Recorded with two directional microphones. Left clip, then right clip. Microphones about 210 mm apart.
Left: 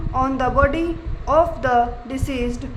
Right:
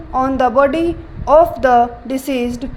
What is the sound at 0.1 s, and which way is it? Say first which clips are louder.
A woman's voice: right 6 dB; 20° right (ahead or behind).